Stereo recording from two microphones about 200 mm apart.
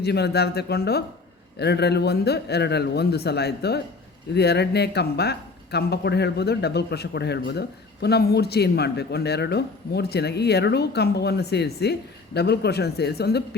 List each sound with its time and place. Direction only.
0.0 s speech: 55° left (ahead or behind)